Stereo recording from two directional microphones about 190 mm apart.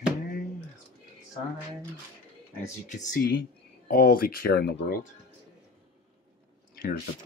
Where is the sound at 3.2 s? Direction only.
50° left (ahead or behind).